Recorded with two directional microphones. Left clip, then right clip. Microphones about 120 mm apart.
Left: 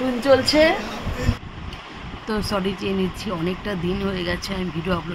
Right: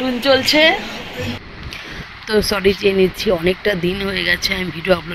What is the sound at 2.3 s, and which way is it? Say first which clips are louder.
Speech: right 9 dB; 25° right (ahead or behind).